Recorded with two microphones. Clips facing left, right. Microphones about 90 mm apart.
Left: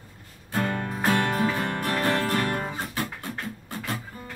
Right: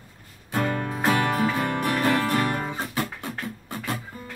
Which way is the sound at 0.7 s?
20° right (ahead or behind).